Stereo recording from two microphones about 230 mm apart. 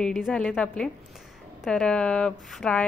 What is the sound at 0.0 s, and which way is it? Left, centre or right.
Speech, centre.